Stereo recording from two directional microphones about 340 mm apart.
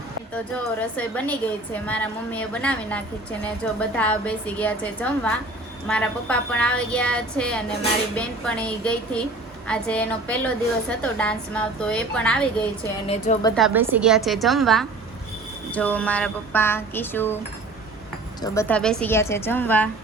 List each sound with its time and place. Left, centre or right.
0.3 s a woman's voice: centre
13.1 s a woman's voice: centre
13.6 s a woman's voice: centre
18.4 s a woman's voice: centre